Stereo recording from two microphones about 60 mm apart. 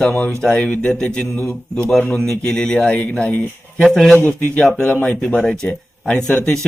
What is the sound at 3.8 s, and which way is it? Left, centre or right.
Speech, centre.